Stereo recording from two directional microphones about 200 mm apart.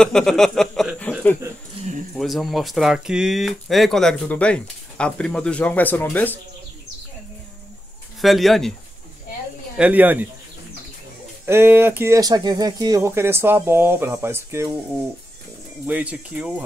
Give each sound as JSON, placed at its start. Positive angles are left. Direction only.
{"t": 0.0, "sound": "speech", "side_deg": 0}
{"t": 1.8, "sound": "speech", "side_deg": -35}
{"t": 2.1, "sound": "speech", "side_deg": 0}
{"t": 8.2, "sound": "speech", "side_deg": 0}
{"t": 9.8, "sound": "speech", "side_deg": -5}
{"t": 11.4, "sound": "speech", "side_deg": -10}
{"t": 15.9, "sound": "speech", "side_deg": -5}